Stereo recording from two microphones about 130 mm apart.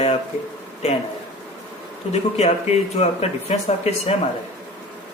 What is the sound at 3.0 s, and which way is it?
Speech, 55° left (ahead or behind).